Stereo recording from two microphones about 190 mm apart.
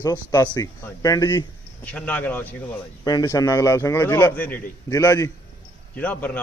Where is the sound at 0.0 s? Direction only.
20° left (ahead or behind).